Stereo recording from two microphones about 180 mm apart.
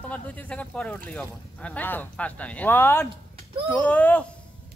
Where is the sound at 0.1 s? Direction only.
10° left (ahead or behind).